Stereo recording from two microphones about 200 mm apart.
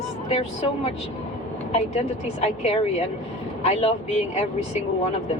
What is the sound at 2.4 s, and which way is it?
A woman's voice, 30° left (ahead or behind).